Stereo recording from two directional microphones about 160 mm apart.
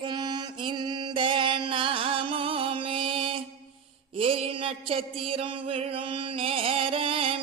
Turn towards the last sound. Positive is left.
turn(degrees=-35)  # may be behind; listen again after turning